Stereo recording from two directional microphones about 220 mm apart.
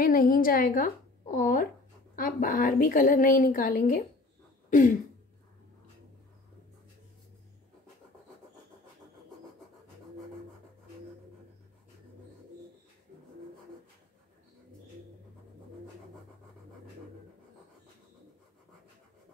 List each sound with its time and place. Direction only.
0.0 s a woman's voice: 40° left (ahead or behind)